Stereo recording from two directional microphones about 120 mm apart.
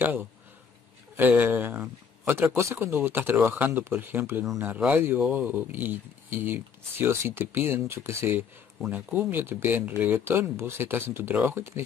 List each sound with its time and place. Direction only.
0.0 s speech: 15° right (ahead or behind)